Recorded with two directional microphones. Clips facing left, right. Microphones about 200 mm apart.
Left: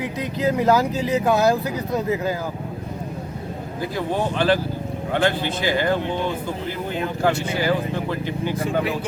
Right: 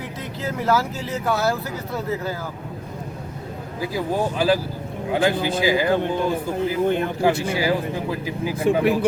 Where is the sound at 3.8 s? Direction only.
5° right (ahead or behind).